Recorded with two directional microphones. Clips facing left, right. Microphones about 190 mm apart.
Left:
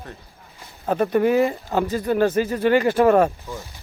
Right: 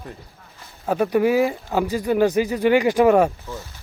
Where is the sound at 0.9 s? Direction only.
10° right (ahead or behind).